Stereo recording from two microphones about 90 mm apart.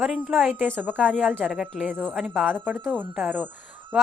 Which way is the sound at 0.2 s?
5° right (ahead or behind).